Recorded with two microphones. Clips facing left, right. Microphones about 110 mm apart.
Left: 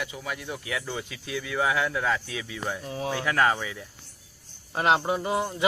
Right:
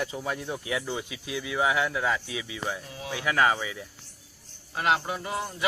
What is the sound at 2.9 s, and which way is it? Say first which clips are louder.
Speech: left 6 dB; 35° left (ahead or behind).